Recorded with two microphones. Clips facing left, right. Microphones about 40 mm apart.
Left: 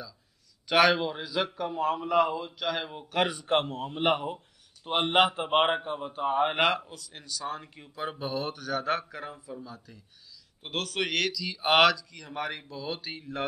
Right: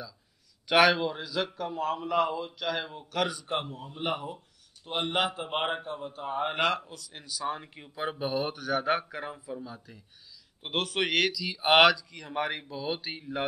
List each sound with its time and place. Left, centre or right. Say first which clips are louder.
0.7 s a man's voice: even; centre
2.9 s a man's voice: left 2 dB; left
3.3 s a man's voice: left 5 dB; left
6.5 s a man's voice: left 2 dB; centre
6.9 s speech: left 1 dB; centre